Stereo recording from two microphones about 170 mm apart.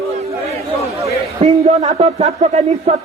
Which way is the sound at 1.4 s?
40° right (ahead or behind).